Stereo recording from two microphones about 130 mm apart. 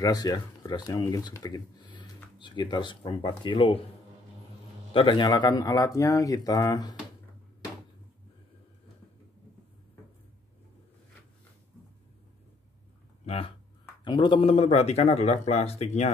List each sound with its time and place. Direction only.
0.0 s speech: 30° left (ahead or behind)
4.9 s speech: 40° left (ahead or behind)
13.2 s a sound: 50° left (ahead or behind)
14.0 s speech: 40° left (ahead or behind); by 16.1 s 55° left (ahead or behind)